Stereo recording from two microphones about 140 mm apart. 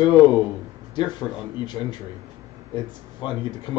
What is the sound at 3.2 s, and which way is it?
Speech, 35° left (ahead or behind).